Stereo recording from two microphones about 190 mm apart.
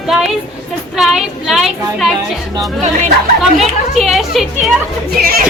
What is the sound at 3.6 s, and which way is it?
Speech, centre (ahead or behind).